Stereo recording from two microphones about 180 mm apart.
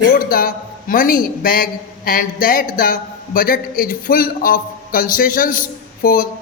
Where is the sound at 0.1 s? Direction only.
55° left (ahead or behind).